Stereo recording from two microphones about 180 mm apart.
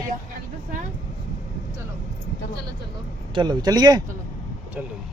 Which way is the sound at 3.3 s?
25° right (ahead or behind).